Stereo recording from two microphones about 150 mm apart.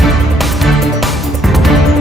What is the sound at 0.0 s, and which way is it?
Music, centre (ahead or behind).